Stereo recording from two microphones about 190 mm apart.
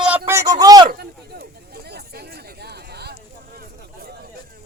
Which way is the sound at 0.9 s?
55° right (ahead or behind).